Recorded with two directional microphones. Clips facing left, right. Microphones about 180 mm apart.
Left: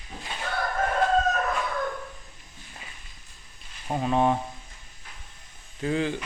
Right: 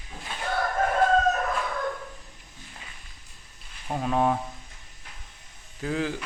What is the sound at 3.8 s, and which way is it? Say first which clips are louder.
Speech: left 1 dB; 5° left (ahead or behind).